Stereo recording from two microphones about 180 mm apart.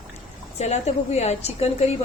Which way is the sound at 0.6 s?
40° left (ahead or behind).